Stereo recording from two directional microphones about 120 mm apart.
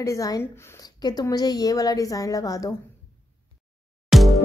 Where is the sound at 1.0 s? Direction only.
35° left (ahead or behind).